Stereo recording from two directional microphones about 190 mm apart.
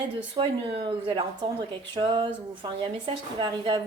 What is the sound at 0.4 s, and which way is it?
A woman's voice, 25° right (ahead or behind).